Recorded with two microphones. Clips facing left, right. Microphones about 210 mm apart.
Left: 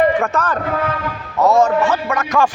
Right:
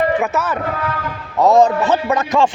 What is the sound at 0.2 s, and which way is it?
A man's voice, 5° right (ahead or behind).